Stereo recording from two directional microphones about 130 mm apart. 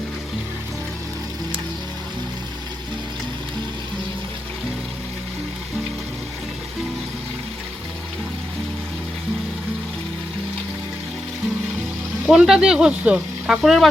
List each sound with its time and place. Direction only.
12.2 s speech: 5° right (ahead or behind)